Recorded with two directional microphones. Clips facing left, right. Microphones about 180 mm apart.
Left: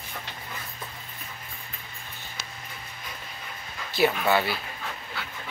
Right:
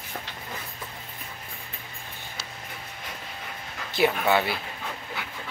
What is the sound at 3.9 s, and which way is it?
Speech, 20° right (ahead or behind).